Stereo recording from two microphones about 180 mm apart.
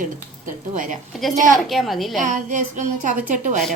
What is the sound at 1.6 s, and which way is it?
Speech, centre (ahead or behind).